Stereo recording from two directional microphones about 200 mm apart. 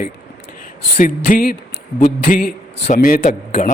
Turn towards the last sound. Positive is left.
turn(degrees=45)  # may be behind; listen again after turning